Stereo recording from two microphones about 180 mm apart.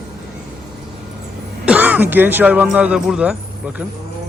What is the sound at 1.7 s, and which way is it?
A man's voice, 10° right (ahead or behind).